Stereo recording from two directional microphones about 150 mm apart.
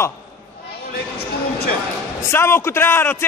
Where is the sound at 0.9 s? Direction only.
90° left.